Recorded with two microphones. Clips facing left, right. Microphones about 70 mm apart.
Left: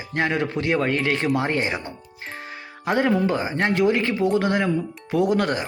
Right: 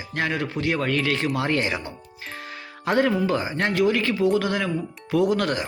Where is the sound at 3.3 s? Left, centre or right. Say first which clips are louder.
Left 2 dB; left.